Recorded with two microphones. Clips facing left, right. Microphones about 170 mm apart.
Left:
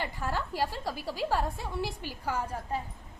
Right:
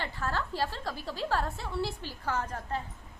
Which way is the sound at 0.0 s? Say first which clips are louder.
Left 1 dB; 15° left (ahead or behind).